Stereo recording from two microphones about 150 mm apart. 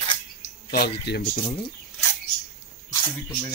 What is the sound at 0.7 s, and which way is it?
Speech, 90° left.